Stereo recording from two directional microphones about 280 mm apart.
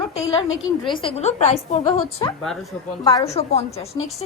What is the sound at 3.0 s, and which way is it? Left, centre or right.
Speech, left.